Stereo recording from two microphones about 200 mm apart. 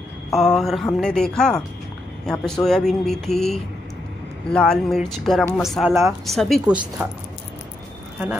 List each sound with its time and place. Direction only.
0.3 s speech: centre (ahead or behind)